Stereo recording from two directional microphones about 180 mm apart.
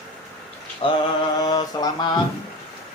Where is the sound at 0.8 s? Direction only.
30° left (ahead or behind).